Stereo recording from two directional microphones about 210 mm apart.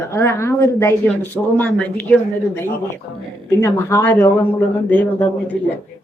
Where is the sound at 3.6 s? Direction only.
10° left (ahead or behind).